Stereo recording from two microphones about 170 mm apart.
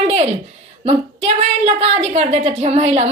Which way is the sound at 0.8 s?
40° right (ahead or behind).